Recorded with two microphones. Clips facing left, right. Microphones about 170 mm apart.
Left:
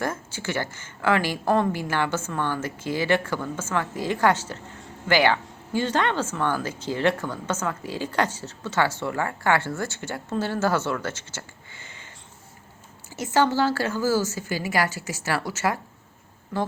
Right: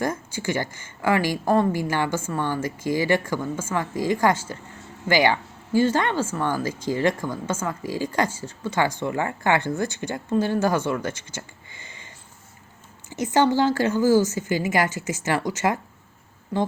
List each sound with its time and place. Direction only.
0.0 s speech: 15° right (ahead or behind)
13.1 s a woman's voice: 15° right (ahead or behind)